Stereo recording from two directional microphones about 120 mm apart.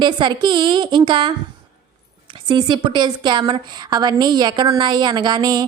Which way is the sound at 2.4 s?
40° right (ahead or behind).